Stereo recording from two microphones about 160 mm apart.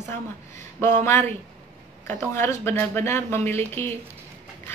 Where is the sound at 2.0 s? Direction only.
15° left (ahead or behind).